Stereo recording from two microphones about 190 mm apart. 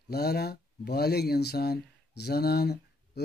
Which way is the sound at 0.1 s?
55° left (ahead or behind).